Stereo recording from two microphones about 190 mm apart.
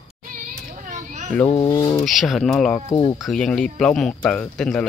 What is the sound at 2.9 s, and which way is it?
Speech, 25° left (ahead or behind).